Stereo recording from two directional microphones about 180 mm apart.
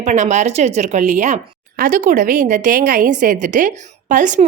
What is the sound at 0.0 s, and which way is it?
A woman's voice, 40° right (ahead or behind).